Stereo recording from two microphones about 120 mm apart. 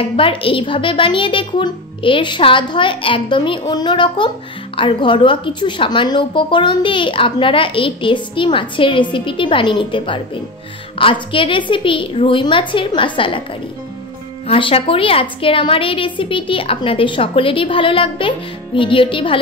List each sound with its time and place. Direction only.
0.1 s speech: 50° left (ahead or behind)
14.5 s speech: 50° left (ahead or behind)